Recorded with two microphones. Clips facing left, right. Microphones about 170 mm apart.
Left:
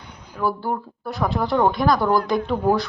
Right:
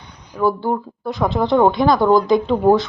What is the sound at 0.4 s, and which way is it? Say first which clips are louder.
Speech: right 5 dB; 20° right (ahead or behind).